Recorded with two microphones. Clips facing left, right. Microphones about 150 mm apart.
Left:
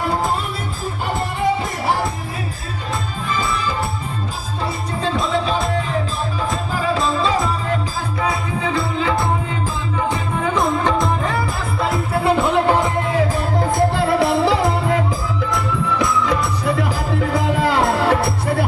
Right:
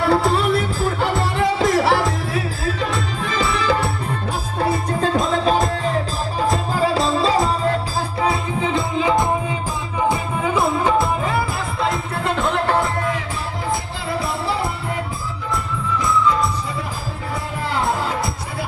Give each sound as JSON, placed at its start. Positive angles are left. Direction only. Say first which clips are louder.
{"t": 0.1, "sound": "music", "louder": "right 5 dB", "side_deg": -75}
{"t": 1.4, "sound": "music", "louder": "right 4 dB", "side_deg": -90}
{"t": 3.2, "sound": "music", "louder": "right 2 dB", "side_deg": -85}
{"t": 5.1, "sound": "music", "louder": "right 1 dB", "side_deg": -45}
{"t": 8.7, "sound": "music", "louder": "right 2 dB", "side_deg": -15}
{"t": 11.8, "sound": "music", "louder": "left 3 dB", "side_deg": 5}
{"t": 13.7, "sound": "music", "louder": "left 9 dB", "side_deg": 60}
{"t": 15.4, "sound": "music", "louder": "left 2 dB", "side_deg": 80}
{"t": 17.3, "sound": "music", "louder": "left 6 dB", "side_deg": 90}